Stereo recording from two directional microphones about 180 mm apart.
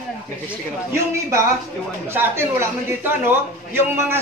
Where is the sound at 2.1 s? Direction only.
15° right (ahead or behind).